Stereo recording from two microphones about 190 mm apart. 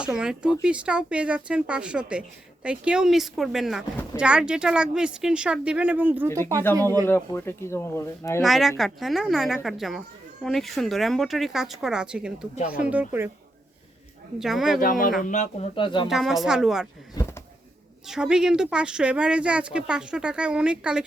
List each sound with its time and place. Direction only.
0.0 s speech: 5° right (ahead or behind)
6.7 s speech: 10° left (ahead or behind)
8.4 s speech: centre (ahead or behind)
14.3 s speech: centre (ahead or behind)
14.8 s speech: 45° left (ahead or behind); by 16.0 s 25° left (ahead or behind)
16.0 s speech: centre (ahead or behind)
17.2 s a sound: 20° left (ahead or behind)
18.1 s speech: 5° right (ahead or behind)